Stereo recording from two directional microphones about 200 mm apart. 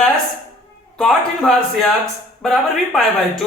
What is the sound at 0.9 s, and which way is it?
A man's voice, centre (ahead or behind).